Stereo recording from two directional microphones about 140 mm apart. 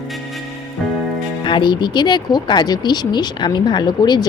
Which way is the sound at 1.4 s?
35° left (ahead or behind).